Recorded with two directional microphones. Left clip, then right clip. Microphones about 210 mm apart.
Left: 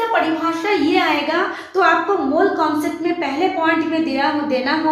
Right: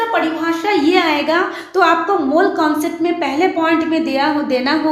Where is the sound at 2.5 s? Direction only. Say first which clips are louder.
Right 2 dB; 40° right (ahead or behind).